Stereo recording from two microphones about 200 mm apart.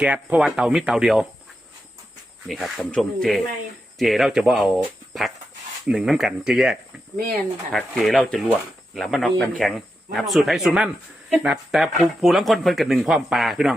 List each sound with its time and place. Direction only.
0.0 s speech: 5° right (ahead or behind)
2.5 s speech: centre (ahead or behind)
5.8 s speech: 5° right (ahead or behind)